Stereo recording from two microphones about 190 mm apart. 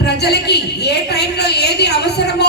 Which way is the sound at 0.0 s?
60° left (ahead or behind).